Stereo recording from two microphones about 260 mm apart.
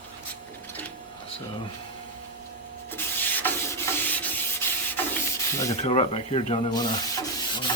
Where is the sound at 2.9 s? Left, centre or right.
Centre.